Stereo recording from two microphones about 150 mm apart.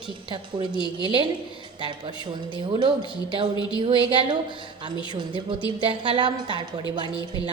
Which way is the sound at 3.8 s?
35° right (ahead or behind).